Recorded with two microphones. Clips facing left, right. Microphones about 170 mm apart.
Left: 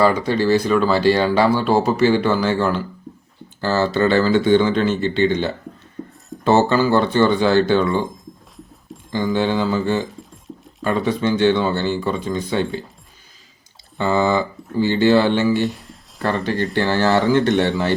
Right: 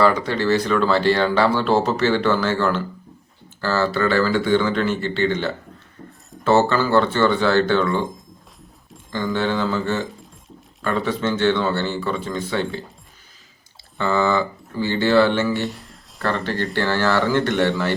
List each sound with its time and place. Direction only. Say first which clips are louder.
0.0 s speech: left 2 dB; 15° left (ahead or behind)
8.1 s a sound: left 4 dB; centre (ahead or behind)
9.1 s speech: left 3 dB; 15° left (ahead or behind)
14.0 s speech: left 2 dB; 15° left (ahead or behind)
15.7 s a sound: left 2 dB; centre (ahead or behind)
16.2 s speech: left 2 dB; 15° left (ahead or behind)